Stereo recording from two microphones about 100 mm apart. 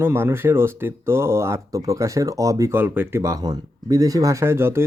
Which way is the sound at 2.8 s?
20° right (ahead or behind).